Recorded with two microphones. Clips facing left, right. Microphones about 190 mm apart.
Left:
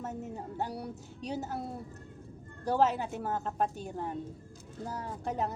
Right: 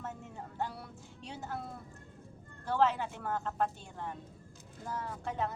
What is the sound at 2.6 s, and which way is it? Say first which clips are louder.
A woman's voice: left 2 dB; 40° left (ahead or behind).